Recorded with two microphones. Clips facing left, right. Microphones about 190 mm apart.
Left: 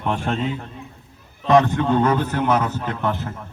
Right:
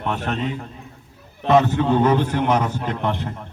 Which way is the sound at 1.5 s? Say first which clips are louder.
Even; 5° right (ahead or behind).